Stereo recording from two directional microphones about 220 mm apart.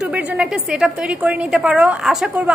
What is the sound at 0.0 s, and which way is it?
A woman's voice, 5° right (ahead or behind).